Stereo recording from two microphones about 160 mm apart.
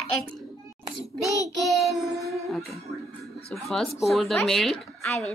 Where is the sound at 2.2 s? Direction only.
20° right (ahead or behind).